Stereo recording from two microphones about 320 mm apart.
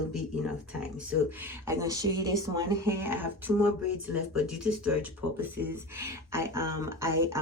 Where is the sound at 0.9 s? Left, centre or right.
Centre.